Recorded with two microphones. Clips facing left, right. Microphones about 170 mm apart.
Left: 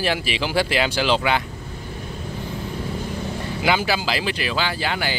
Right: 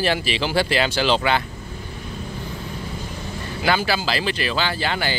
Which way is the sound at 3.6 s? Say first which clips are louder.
Even; 15° left (ahead or behind).